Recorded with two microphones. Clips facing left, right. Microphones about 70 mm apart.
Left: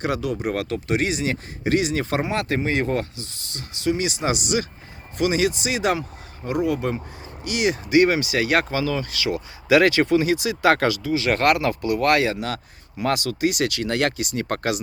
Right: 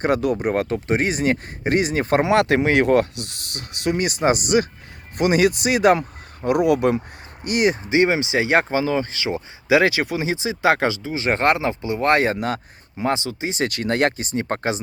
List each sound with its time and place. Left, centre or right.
0.0 s speech: right
2.2 s speech: right
7.4 s speech: right
7.9 s speech: right
13.0 s speech: right
13.7 s speech: right